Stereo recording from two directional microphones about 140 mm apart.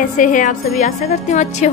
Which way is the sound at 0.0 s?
70° left (ahead or behind).